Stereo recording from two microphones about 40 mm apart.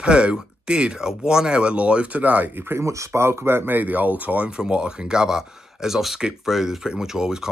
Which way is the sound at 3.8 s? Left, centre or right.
Right.